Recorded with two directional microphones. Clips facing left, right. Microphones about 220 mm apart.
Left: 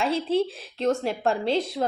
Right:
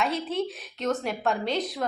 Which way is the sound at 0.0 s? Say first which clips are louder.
Left 4 dB; 30° left (ahead or behind).